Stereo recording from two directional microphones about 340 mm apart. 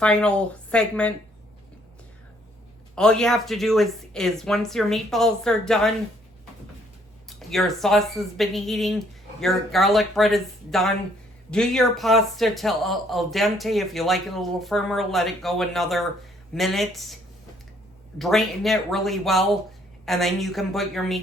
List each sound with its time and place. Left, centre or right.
0.0 s speech: centre
2.9 s speech: centre
7.3 s speech: centre
18.2 s speech: centre